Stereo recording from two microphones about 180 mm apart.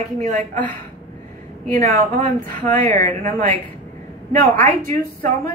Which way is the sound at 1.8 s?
45° right (ahead or behind).